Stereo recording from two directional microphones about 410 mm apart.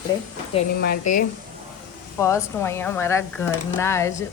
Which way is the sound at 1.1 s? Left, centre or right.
Centre.